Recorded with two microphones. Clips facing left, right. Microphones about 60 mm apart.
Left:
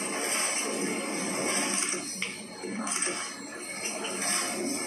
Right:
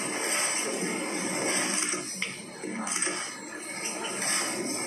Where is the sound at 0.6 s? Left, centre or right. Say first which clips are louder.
Even; right.